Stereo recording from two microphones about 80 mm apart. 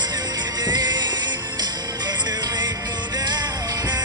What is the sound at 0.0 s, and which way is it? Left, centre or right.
Music, right.